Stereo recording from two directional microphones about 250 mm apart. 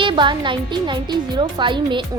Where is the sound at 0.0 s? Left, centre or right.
Centre.